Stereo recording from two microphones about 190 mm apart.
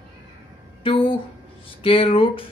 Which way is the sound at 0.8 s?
30° left (ahead or behind).